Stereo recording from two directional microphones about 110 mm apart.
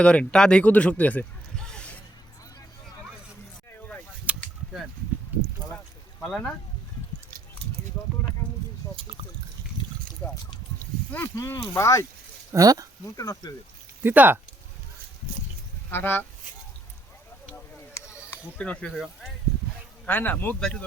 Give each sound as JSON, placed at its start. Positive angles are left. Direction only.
{"t": 0.0, "sound": "speech", "side_deg": 10}
{"t": 4.3, "sound": "a sound", "side_deg": -10}
{"t": 5.4, "sound": "a sound", "side_deg": 5}
{"t": 10.2, "sound": "speech", "side_deg": 20}
{"t": 11.3, "sound": "speech", "side_deg": 30}
{"t": 12.5, "sound": "speech", "side_deg": -30}
{"t": 13.1, "sound": "speech", "side_deg": 35}
{"t": 14.0, "sound": "speech", "side_deg": -15}
{"t": 15.9, "sound": "speech", "side_deg": 20}
{"t": 17.5, "sound": "a sound", "side_deg": 25}
{"t": 18.5, "sound": "speech", "side_deg": 10}
{"t": 20.1, "sound": "speech", "side_deg": 15}